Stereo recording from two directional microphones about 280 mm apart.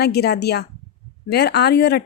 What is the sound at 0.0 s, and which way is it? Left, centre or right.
Speech, left.